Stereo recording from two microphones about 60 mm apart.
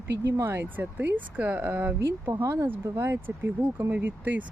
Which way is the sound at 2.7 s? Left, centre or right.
Right.